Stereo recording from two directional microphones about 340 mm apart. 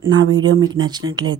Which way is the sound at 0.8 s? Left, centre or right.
Centre.